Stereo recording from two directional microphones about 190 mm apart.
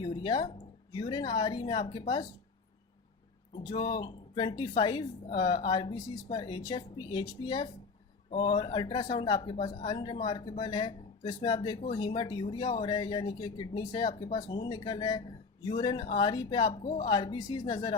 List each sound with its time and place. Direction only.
0.0 s a sound: 25° left (ahead or behind)
0.9 s speech: 20° left (ahead or behind)
3.7 s speech: 25° left (ahead or behind)